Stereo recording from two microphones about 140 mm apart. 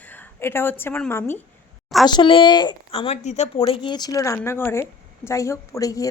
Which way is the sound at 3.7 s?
35° left (ahead or behind).